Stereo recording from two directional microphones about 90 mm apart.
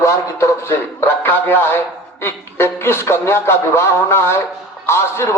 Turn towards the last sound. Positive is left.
turn(degrees=30)  # may be behind; listen again after turning